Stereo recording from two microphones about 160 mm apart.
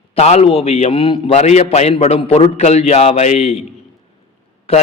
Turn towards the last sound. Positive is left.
turn(degrees=35)  # may be behind; listen again after turning